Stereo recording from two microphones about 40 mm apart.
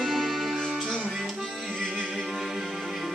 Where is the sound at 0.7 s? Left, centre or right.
Centre.